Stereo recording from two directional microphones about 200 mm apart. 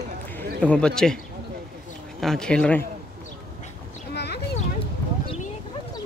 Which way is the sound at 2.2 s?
5° left (ahead or behind).